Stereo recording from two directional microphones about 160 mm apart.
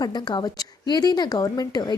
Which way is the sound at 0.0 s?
25° left (ahead or behind).